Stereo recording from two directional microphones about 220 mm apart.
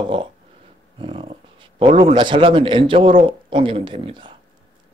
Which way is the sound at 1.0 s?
25° right (ahead or behind).